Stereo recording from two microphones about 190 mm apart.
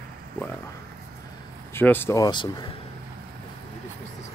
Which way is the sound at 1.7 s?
10° left (ahead or behind).